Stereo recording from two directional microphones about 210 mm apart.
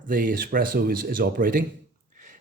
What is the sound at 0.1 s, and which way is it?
Speech, 40° right (ahead or behind).